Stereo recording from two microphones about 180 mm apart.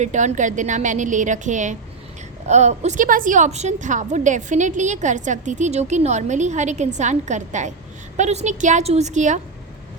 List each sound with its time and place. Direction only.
0.0 s a woman's voice: 40° right (ahead or behind)